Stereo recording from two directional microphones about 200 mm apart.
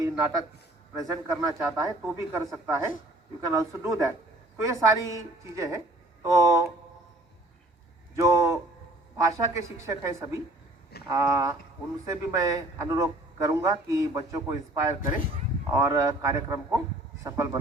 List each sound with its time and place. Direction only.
0.0 s a man's voice: 15° right (ahead or behind)
8.1 s a man's voice: 15° right (ahead or behind)